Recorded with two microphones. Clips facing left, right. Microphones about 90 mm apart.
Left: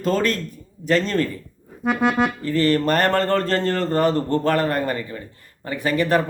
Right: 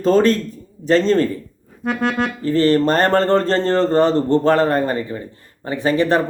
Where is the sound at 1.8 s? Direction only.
5° left (ahead or behind).